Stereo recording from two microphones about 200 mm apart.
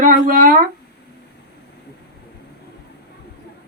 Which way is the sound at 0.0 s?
40° right (ahead or behind).